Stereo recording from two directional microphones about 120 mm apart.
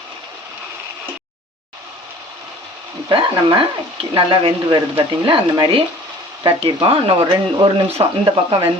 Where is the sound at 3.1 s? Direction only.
40° right (ahead or behind).